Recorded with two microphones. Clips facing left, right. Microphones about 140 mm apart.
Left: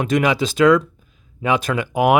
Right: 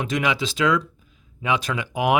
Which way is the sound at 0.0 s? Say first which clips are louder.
Left 6 dB; 50° left (ahead or behind).